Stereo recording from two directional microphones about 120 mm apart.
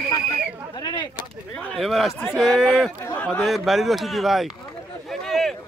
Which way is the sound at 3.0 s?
15° left (ahead or behind).